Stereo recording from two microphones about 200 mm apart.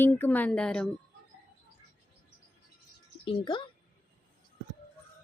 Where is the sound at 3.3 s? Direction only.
25° left (ahead or behind).